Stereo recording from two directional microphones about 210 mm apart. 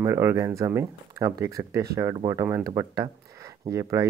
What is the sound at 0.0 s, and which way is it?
Speech, 15° right (ahead or behind).